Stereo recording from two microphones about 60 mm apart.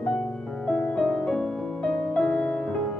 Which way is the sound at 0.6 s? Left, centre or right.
Centre.